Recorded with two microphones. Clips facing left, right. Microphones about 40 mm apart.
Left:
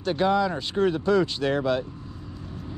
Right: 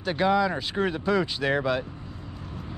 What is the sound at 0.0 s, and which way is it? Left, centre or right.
Speech, centre.